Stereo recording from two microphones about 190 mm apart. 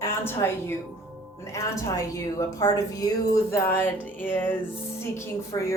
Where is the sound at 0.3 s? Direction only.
10° left (ahead or behind).